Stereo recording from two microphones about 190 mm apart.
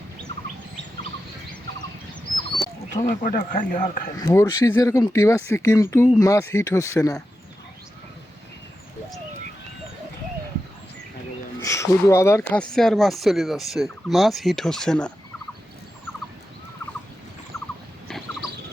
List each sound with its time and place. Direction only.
2.9 s speech: 45° left (ahead or behind)
4.2 s speech: 20° left (ahead or behind)
11.6 s speech: 15° left (ahead or behind)
17.5 s rodents: 15° left (ahead or behind)
18.1 s a sound: 5° left (ahead or behind)